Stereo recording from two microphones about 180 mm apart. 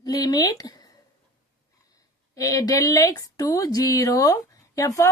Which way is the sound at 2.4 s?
20° left (ahead or behind).